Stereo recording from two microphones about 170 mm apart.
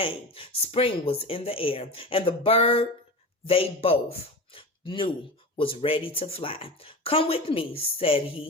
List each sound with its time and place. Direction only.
0.0 s speech: 35° left (ahead or behind)